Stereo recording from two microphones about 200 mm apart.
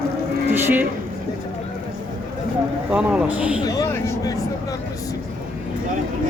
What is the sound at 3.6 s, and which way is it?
Speech, 20° left (ahead or behind).